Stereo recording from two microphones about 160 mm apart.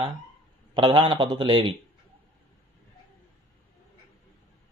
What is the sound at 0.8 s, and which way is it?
Speech, 30° right (ahead or behind).